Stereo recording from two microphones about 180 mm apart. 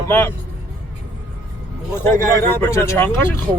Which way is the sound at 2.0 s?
15° left (ahead or behind).